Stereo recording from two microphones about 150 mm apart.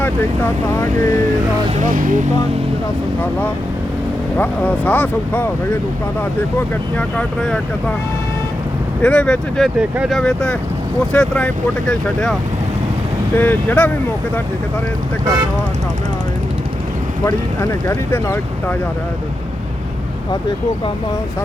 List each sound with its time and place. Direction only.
0.0 s speech: 15° left (ahead or behind)
1.7 s speech: 60° right (ahead or behind)
4.4 s speech: 10° left (ahead or behind)
6.9 s speech: 5° left (ahead or behind)
9.0 s speech: 5° left (ahead or behind)
9.7 s speech: 10° right (ahead or behind)
10.2 s speech: 5° left (ahead or behind)
17.2 s speech: 20° left (ahead or behind)